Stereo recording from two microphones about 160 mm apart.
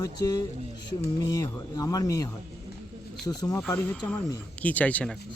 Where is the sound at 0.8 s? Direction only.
90° left.